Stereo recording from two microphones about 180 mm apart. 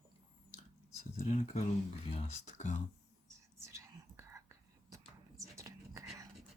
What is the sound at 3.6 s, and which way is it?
Whispering, 15° right (ahead or behind).